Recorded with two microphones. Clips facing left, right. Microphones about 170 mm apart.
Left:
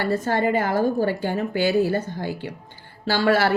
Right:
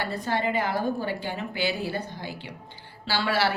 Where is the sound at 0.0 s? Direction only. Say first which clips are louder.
Left 6 dB; 45° left (ahead or behind).